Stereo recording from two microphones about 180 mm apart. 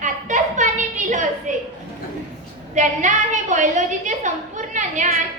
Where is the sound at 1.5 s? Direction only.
45° right (ahead or behind).